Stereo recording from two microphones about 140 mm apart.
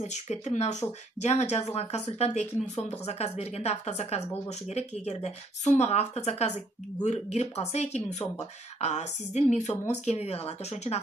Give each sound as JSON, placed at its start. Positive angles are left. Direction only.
{"t": 0.0, "sound": "speech", "side_deg": 55}